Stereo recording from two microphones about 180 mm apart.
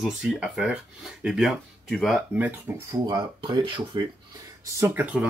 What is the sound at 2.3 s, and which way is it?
Speech, 10° right (ahead or behind).